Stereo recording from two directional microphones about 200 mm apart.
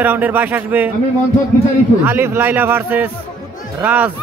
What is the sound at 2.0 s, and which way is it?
Speech, 10° right (ahead or behind).